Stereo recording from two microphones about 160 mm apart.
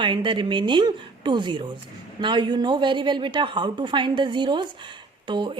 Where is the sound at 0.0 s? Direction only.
30° right (ahead or behind).